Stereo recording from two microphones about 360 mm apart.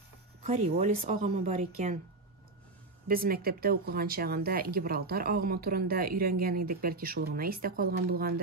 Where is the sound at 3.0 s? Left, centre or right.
Right.